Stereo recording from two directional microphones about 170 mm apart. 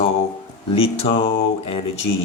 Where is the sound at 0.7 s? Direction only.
35° left (ahead or behind).